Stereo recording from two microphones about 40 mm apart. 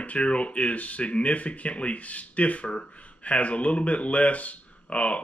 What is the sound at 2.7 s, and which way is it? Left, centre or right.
Speech, left.